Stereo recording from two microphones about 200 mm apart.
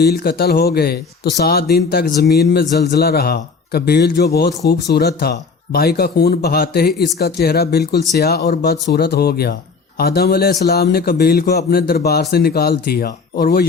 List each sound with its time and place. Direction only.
0.0 s speech: 50° left (ahead or behind)